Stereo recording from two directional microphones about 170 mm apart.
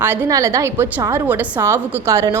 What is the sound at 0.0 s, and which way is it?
A woman's voice, 10° right (ahead or behind).